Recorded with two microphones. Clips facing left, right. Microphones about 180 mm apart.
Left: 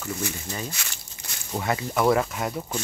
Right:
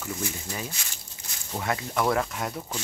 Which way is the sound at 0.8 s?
75° left (ahead or behind).